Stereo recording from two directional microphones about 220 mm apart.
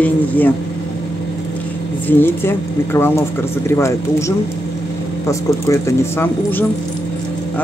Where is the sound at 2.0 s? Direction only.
10° left (ahead or behind).